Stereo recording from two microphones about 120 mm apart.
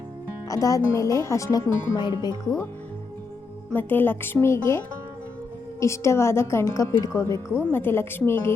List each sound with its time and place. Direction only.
0.4 s speech: 30° left (ahead or behind)
3.7 s speech: 15° left (ahead or behind)
5.8 s speech: 25° left (ahead or behind)